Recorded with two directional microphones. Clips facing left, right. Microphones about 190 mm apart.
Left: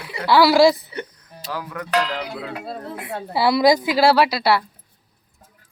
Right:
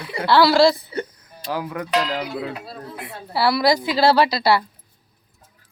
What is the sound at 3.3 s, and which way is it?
A woman's voice, 20° left (ahead or behind).